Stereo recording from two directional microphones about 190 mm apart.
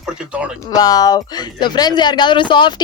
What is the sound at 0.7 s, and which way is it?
Speech, 20° left (ahead or behind).